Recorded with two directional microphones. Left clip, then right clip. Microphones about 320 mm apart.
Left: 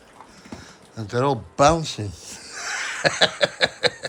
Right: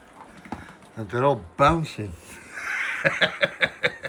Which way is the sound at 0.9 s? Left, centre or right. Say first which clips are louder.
Even; centre.